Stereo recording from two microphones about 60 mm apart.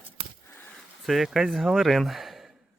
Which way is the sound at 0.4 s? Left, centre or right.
Left.